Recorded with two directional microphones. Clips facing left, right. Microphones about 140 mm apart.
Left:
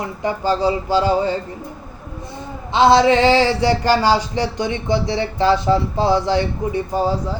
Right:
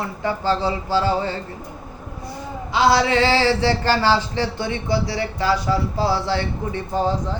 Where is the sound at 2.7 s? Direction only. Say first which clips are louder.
Left 5 dB; 25° left (ahead or behind).